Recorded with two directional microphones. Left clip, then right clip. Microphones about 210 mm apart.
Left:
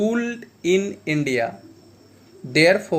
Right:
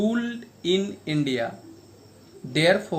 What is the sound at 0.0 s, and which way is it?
Speech, 20° left (ahead or behind).